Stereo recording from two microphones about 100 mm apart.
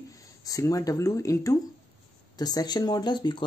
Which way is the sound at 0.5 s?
35° left (ahead or behind).